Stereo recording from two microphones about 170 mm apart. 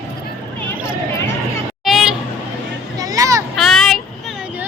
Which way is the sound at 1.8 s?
Centre (ahead or behind).